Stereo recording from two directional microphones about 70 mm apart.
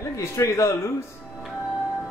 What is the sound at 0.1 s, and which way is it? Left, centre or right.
Speech, left.